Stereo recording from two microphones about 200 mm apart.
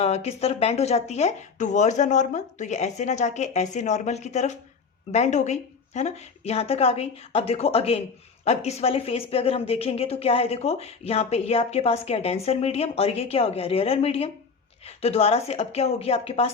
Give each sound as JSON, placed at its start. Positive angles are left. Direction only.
{"t": 0.0, "sound": "a woman's voice", "side_deg": 30}